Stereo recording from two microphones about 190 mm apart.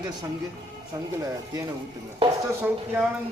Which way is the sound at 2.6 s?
10° right (ahead or behind).